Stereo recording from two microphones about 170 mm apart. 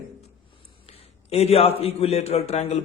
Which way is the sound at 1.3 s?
35° left (ahead or behind).